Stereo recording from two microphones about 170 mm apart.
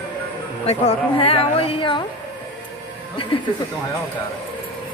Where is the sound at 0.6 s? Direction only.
35° left (ahead or behind).